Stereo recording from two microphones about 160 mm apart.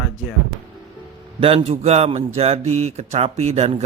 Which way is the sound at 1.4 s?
35° right (ahead or behind).